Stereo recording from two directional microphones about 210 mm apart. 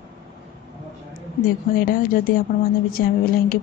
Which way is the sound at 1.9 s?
45° left (ahead or behind).